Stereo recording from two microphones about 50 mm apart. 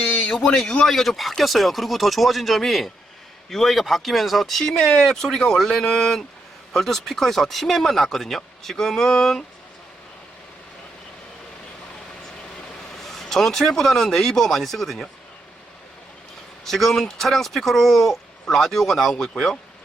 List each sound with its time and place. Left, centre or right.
0.0 s a sound: left
0.3 s speech: centre
13.0 s speech: centre
16.6 s speech: centre